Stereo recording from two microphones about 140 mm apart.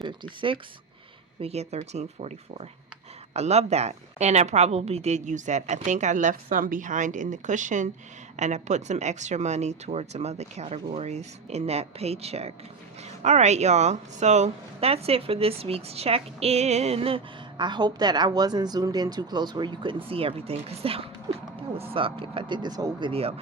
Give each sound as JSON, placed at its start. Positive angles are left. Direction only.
{"t": 0.0, "sound": "speech", "side_deg": -35}
{"t": 1.4, "sound": "a woman's voice", "side_deg": -50}